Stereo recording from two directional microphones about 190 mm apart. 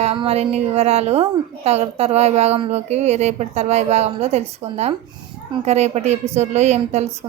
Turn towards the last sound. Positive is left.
turn(degrees=-35)  # may be behind; listen again after turning